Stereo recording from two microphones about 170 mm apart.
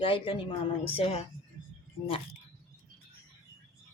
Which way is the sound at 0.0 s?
30° left (ahead or behind).